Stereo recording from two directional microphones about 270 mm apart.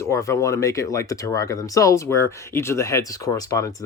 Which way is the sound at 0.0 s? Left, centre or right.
Centre.